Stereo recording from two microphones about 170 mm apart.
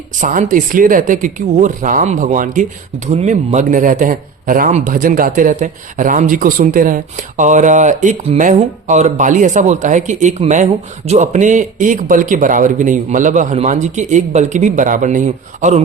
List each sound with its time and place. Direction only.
0.2 s speech: 50° right (ahead or behind)